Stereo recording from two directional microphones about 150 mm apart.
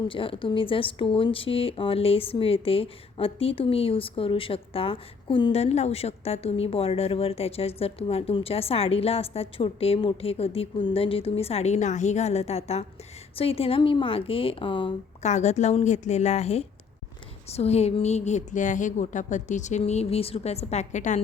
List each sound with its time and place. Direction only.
0.1 s speech: 35° left (ahead or behind)
15.2 s a woman's voice: 50° left (ahead or behind)